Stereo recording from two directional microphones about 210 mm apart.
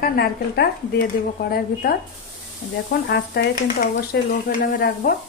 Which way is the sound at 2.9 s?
55° left (ahead or behind).